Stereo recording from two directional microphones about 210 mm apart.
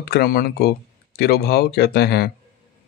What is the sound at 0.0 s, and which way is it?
Speech, 50° left (ahead or behind).